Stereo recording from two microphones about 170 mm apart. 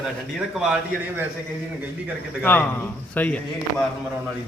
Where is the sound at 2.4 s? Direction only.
10° left (ahead or behind).